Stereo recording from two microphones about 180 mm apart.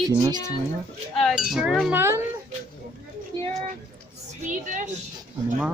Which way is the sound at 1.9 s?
15° right (ahead or behind).